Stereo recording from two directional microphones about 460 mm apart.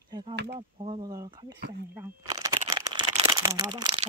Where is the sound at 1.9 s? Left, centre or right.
Centre.